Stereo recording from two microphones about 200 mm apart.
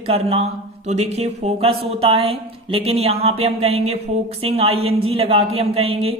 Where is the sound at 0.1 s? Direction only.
30° right (ahead or behind).